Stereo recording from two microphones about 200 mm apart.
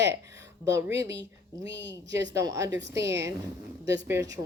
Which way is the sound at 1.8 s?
60° right (ahead or behind).